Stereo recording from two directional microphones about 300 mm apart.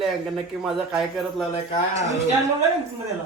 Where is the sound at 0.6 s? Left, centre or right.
Centre.